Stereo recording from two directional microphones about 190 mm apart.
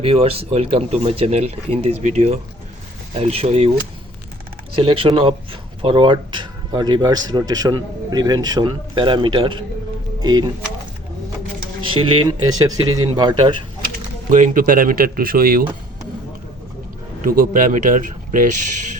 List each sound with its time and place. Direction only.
0.0 s speech: 30° right (ahead or behind)
4.7 s speech: 30° right (ahead or behind)
11.9 s speech: 30° right (ahead or behind)
14.3 s speech: 40° right (ahead or behind)
17.2 s speech: 45° right (ahead or behind)